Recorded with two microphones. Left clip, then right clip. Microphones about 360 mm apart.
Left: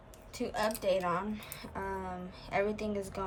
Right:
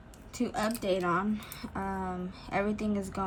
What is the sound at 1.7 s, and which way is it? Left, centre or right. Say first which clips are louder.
Speech: right 3 dB; left.